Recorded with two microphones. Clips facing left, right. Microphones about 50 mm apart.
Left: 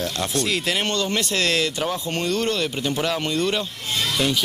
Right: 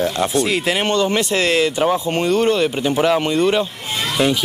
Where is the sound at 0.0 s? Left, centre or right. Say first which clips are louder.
Right 7 dB; centre.